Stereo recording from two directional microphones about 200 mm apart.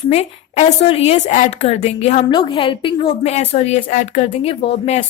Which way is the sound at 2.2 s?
25° left (ahead or behind).